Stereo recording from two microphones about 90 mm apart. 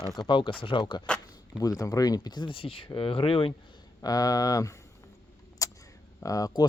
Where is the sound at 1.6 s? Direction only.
40° left (ahead or behind); by 3.5 s 90° left.